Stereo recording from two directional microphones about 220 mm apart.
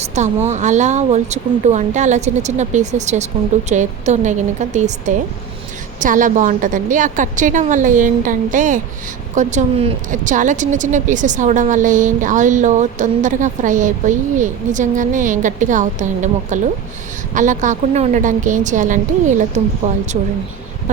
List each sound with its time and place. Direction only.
0.0 s speech: 30° right (ahead or behind)